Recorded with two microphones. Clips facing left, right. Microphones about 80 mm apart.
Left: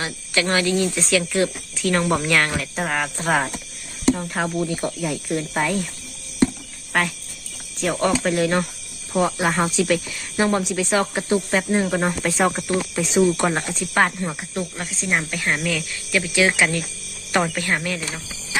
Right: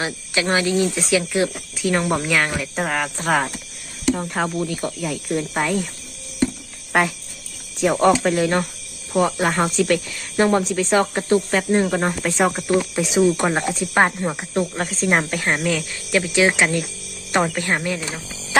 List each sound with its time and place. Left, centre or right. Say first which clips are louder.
0.0 s speech: right 1 dB; right
1.8 s speech: even; centre
6.9 s speech: right 3 dB; centre
13.3 s speech: right 2 dB; centre
14.5 s speech: right 6 dB; right